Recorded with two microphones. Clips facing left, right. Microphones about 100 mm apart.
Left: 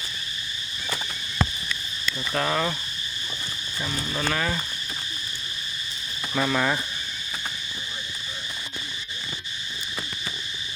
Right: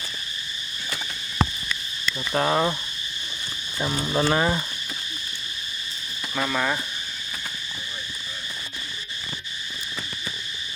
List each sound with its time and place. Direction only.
2.3 s cricket: 25° right (ahead or behind)
3.8 s cricket: 30° right (ahead or behind)
6.3 s speech: centre (ahead or behind)